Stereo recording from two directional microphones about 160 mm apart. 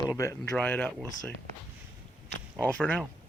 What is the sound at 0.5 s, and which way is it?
Speech, 5° left (ahead or behind).